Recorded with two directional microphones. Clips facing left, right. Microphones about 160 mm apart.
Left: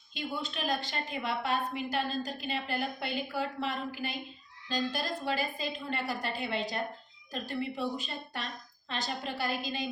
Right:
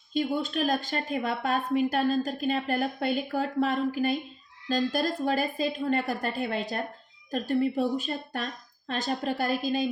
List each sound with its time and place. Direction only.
0.1 s a woman's voice: 45° right (ahead or behind)